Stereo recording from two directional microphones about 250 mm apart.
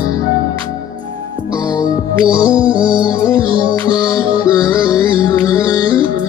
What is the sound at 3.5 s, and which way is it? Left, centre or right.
Music, centre.